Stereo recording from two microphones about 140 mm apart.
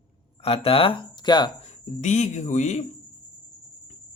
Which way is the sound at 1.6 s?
60° left (ahead or behind).